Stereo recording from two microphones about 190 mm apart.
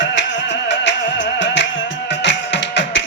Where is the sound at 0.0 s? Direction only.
70° left (ahead or behind).